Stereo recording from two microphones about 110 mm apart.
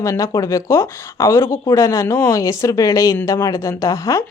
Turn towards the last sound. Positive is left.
turn(degrees=30)  # may be behind; listen again after turning